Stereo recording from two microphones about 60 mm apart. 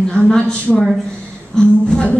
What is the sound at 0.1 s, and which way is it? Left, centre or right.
A woman's voice, centre.